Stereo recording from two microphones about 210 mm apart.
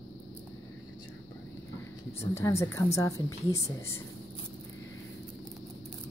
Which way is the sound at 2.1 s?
10° left (ahead or behind).